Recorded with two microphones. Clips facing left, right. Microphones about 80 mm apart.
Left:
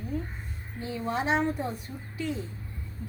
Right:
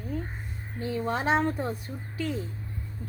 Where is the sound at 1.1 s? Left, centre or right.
Right.